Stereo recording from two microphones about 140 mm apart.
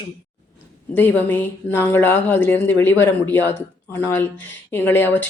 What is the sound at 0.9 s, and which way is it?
Speech, 15° left (ahead or behind).